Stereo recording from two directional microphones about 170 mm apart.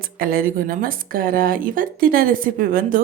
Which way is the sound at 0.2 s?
60° right (ahead or behind).